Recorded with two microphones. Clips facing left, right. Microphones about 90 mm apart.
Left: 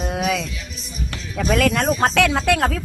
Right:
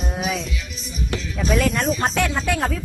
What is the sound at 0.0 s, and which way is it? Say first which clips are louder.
Music: left 3 dB; 75° left (ahead or behind).